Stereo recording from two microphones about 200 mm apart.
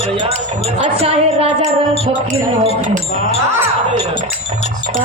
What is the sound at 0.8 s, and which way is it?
Music, 30° right (ahead or behind).